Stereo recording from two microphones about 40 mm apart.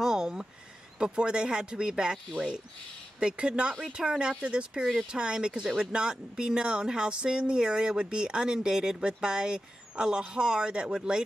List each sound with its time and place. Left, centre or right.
0.0 s a sound: centre
0.9 s speech: right
3.2 s speech: right